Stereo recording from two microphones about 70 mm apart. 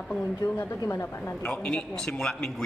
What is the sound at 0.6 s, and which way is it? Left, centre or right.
Speech, left.